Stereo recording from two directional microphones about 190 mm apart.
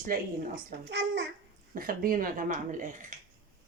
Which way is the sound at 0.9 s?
65° right (ahead or behind).